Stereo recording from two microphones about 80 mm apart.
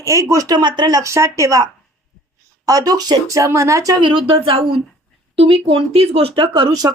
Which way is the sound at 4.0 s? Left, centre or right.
Right.